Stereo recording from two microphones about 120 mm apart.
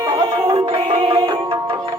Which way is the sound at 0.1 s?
35° right (ahead or behind).